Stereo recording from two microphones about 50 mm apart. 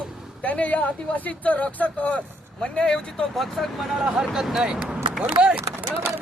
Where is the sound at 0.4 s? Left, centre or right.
Left.